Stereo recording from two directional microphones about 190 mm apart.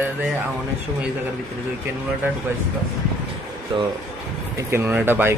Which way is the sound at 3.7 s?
25° right (ahead or behind).